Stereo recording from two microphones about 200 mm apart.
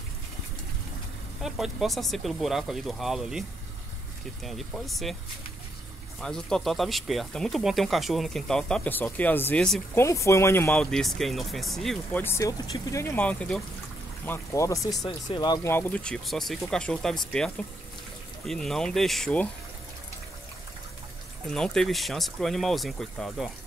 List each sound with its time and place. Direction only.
1.4 s speech: centre (ahead or behind)
6.2 s speech: 5° left (ahead or behind)
21.5 s speech: 5° left (ahead or behind)